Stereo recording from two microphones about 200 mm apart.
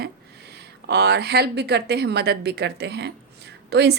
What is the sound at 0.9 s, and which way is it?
A woman's voice, 55° right (ahead or behind).